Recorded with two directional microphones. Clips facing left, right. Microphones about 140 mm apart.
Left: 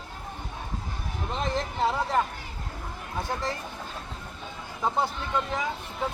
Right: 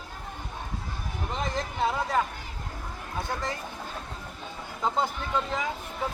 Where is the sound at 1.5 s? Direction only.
15° right (ahead or behind).